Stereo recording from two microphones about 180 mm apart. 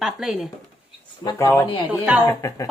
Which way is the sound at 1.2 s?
20° left (ahead or behind).